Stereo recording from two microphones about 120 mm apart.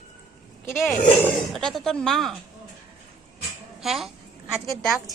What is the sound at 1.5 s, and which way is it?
Speech, 5° left (ahead or behind).